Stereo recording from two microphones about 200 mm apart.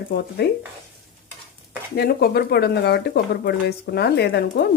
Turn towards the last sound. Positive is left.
turn(degrees=55)  # may be behind; listen again after turning